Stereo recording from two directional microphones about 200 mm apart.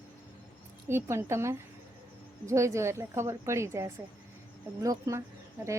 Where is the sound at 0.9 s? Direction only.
15° right (ahead or behind).